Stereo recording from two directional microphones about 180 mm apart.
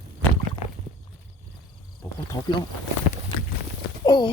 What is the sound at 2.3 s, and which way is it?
Speech, 20° left (ahead or behind).